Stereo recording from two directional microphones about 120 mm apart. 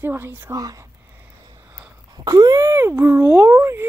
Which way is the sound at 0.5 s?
30° right (ahead or behind).